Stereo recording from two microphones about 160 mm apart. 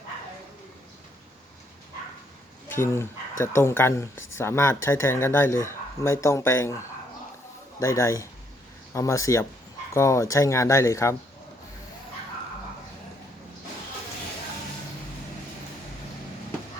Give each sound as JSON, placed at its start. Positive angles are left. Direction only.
{"t": 2.6, "sound": "speech", "side_deg": 15}
{"t": 7.8, "sound": "speech", "side_deg": 15}